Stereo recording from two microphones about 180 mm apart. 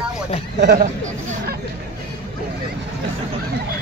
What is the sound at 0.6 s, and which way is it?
Speech, 65° right (ahead or behind).